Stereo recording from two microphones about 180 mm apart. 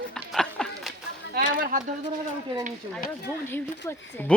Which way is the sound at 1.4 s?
55° right (ahead or behind).